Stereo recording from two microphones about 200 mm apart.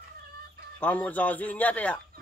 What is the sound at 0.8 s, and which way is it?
Speech, 5° left (ahead or behind).